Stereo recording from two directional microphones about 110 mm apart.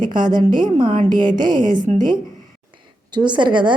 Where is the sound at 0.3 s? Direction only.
40° right (ahead or behind).